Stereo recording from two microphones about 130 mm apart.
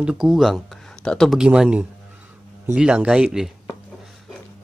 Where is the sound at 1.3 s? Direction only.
5° right (ahead or behind).